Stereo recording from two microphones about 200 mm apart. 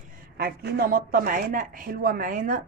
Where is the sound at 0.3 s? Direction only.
50° right (ahead or behind).